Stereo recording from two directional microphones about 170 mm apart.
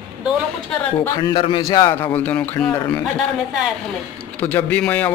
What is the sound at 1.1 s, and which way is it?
Speech, 25° left (ahead or behind).